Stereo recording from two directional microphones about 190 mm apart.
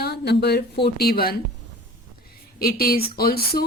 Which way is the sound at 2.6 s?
50° left (ahead or behind).